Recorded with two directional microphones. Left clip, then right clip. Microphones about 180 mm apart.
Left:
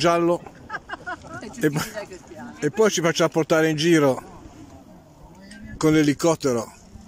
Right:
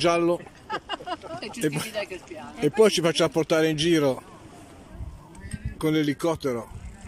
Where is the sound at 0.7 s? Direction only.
20° right (ahead or behind).